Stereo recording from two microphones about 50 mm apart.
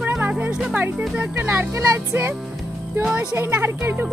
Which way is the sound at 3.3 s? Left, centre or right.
Right.